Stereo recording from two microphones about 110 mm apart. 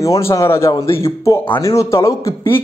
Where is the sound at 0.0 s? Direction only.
30° left (ahead or behind).